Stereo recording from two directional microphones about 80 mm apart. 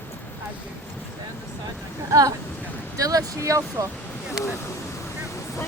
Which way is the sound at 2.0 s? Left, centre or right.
Right.